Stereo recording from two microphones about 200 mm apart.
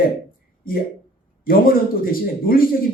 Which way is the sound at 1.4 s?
45° left (ahead or behind).